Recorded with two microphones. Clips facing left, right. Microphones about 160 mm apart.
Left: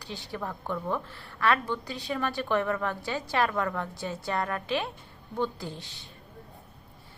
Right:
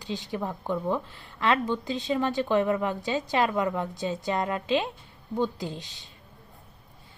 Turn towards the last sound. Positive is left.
turn(degrees=-15)  # may be behind; listen again after turning